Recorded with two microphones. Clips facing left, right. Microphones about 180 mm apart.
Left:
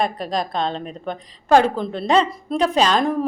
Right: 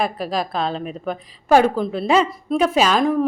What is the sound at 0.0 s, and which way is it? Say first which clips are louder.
A woman's voice: even; 5° right (ahead or behind).